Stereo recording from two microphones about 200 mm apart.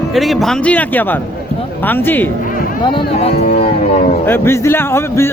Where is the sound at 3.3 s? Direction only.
50° left (ahead or behind).